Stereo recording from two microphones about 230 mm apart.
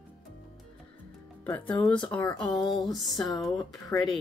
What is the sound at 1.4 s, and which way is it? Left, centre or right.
Speech, centre.